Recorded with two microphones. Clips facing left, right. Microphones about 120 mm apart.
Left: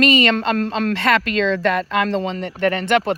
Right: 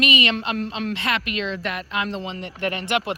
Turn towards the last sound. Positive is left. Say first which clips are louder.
# left 7 dB
turn(degrees=50)  # may be behind; listen again after turning